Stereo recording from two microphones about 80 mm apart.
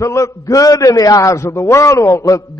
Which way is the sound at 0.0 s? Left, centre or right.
Left.